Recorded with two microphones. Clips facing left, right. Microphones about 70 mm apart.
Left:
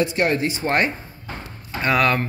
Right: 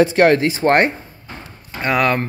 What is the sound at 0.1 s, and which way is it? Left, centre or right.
Speech, right.